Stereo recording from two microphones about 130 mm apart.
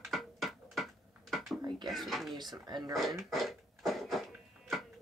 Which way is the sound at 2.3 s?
35° right (ahead or behind).